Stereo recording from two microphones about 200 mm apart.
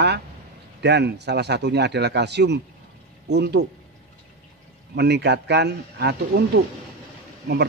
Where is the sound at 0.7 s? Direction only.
55° right (ahead or behind).